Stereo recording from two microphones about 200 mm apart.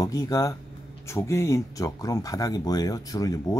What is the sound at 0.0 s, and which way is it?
Speech, 15° left (ahead or behind).